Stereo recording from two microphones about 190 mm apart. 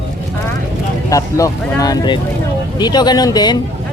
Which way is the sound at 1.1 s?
15° left (ahead or behind).